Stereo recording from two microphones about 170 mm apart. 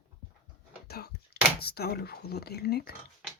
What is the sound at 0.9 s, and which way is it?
Speech, 70° left (ahead or behind).